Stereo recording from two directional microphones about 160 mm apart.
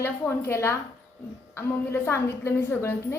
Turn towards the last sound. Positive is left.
turn(degrees=15)  # may be behind; listen again after turning